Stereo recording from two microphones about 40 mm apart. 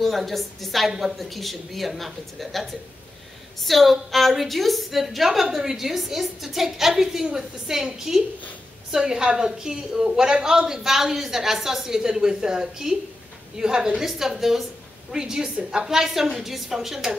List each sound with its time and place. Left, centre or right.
0.0 s a woman's voice: centre
3.6 s a woman's voice: centre